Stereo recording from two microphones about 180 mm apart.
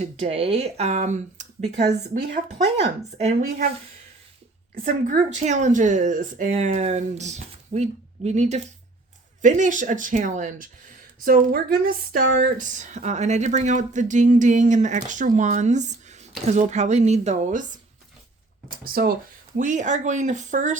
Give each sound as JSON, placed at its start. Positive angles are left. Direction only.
{"t": 0.0, "sound": "speech", "side_deg": -35}
{"t": 4.7, "sound": "speech", "side_deg": -50}
{"t": 11.3, "sound": "speech", "side_deg": -55}
{"t": 19.0, "sound": "speech", "side_deg": -55}
{"t": 19.5, "sound": "speech", "side_deg": -45}